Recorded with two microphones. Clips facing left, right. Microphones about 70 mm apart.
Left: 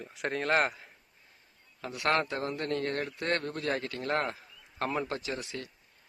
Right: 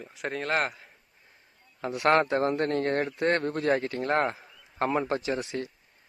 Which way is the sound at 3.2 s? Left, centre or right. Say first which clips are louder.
Right 6 dB; right.